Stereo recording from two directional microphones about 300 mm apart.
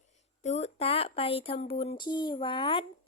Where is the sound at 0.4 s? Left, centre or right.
Left.